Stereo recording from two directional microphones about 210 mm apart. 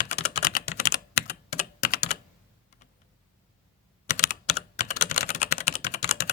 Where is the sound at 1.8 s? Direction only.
45° left (ahead or behind).